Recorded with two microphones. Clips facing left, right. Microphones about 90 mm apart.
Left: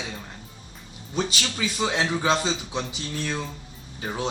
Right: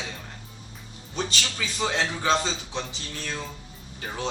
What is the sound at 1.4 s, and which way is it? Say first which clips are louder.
A man's voice: left 2 dB; 20° left (ahead or behind).